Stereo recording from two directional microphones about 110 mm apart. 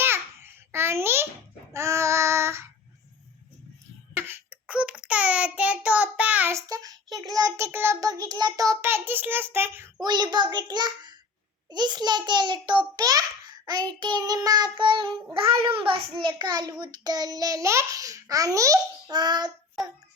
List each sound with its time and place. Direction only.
0.0 s babbling: 20° right (ahead or behind)
1.7 s child singing: 25° right (ahead or behind)
4.1 s a sound: 20° right (ahead or behind)
4.6 s child singing: 10° right (ahead or behind)
6.5 s child singing: 30° right (ahead or behind)
8.0 s child singing: 35° right (ahead or behind); by 9.9 s 20° right (ahead or behind)
10.0 s a child's voice: 40° right (ahead or behind)